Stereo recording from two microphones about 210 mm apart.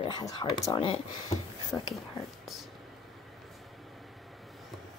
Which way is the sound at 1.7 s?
5° left (ahead or behind).